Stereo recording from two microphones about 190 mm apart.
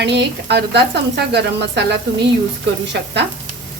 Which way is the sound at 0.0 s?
65° right (ahead or behind).